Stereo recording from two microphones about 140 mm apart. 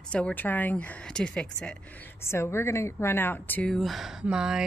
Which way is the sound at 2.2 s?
20° left (ahead or behind).